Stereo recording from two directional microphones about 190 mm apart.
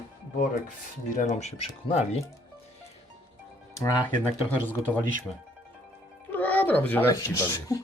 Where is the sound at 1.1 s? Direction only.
35° left (ahead or behind).